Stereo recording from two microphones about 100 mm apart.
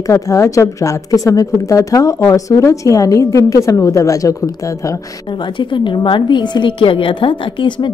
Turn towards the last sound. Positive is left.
turn(degrees=55)  # may be behind; listen again after turning